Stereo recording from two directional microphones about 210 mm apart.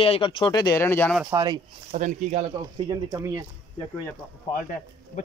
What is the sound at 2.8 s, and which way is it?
Speech, 20° right (ahead or behind).